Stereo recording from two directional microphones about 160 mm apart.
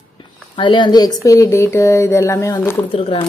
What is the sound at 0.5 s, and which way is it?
Speech, 30° left (ahead or behind).